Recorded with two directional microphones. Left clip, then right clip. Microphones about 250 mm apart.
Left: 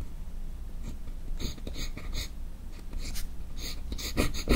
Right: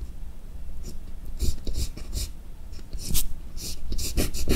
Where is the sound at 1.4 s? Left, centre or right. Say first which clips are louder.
Right 2 dB; centre.